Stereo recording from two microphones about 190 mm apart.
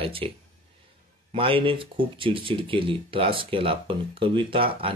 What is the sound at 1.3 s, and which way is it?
Speech, 30° right (ahead or behind).